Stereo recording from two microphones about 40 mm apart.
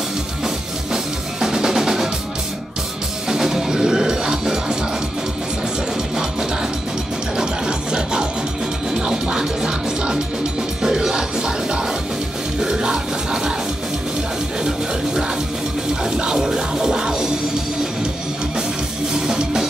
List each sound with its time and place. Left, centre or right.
0.9 s drum kit: centre
3.3 s music: centre
7.3 s music: right
16.0 s music: right
19.1 s music: centre